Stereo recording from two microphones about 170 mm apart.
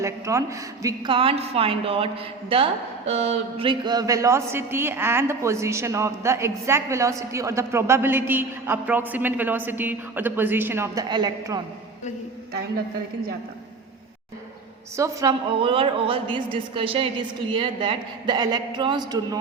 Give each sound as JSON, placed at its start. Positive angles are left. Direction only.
{"t": 0.0, "sound": "a woman's voice", "side_deg": -15}
{"t": 1.1, "sound": "a woman's voice", "side_deg": -30}
{"t": 3.7, "sound": "a woman's voice", "side_deg": -25}
{"t": 14.9, "sound": "a man's voice", "side_deg": -20}
{"t": 15.5, "sound": "a woman's voice", "side_deg": -30}